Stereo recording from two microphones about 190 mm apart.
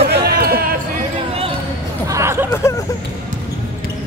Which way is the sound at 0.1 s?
55° right (ahead or behind).